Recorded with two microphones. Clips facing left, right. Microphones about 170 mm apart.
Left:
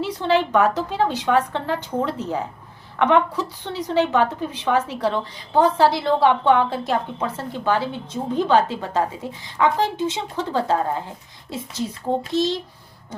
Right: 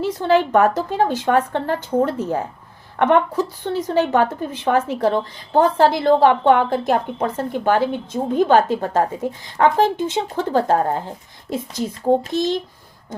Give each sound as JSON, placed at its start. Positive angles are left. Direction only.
{"t": 0.0, "sound": "a woman's voice", "side_deg": -45}
{"t": 11.4, "sound": "speech", "side_deg": -15}
{"t": 12.3, "sound": "a woman's voice", "side_deg": -50}